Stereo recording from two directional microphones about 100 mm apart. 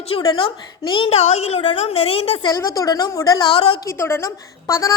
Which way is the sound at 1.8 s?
75° left (ahead or behind).